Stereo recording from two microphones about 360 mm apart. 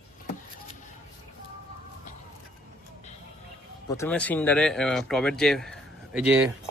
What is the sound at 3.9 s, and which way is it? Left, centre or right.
Speech, centre.